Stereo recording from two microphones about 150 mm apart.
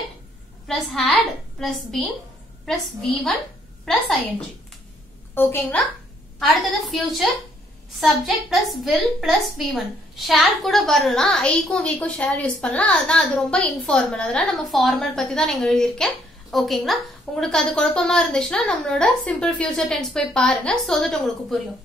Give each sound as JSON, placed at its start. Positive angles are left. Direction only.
{"t": 0.7, "sound": "a woman's voice", "side_deg": 0}
{"t": 5.3, "sound": "a woman's voice", "side_deg": 15}
{"t": 6.4, "sound": "a woman's voice", "side_deg": 0}